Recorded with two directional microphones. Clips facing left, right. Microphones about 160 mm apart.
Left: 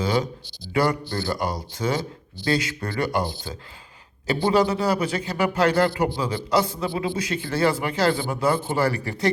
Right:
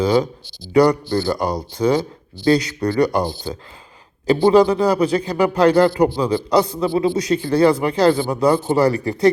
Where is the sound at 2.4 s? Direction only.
35° right (ahead or behind).